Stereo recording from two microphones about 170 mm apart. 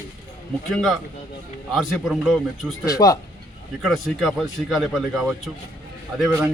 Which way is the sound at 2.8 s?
20° left (ahead or behind).